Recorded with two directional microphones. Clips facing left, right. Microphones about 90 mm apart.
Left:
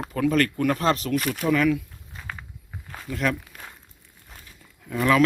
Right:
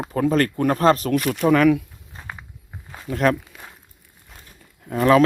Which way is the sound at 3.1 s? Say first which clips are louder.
Right 6 dB; 45° right (ahead or behind).